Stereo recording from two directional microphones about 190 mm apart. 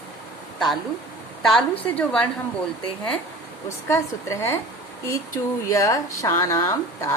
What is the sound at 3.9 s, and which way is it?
Speech, 15° left (ahead or behind).